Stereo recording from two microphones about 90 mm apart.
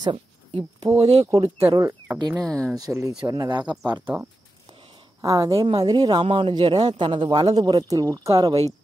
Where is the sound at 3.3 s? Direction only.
50° right (ahead or behind).